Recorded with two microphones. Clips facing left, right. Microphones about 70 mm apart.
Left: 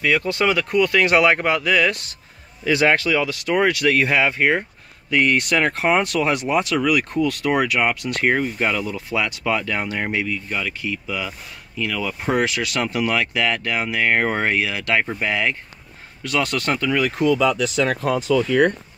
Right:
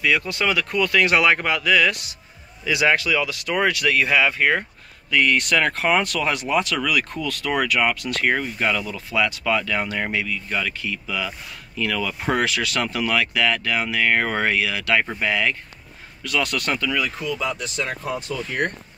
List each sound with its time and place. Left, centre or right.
0.0 s speech: left
2.6 s speech: left
17.0 s speech: left
17.4 s speech: left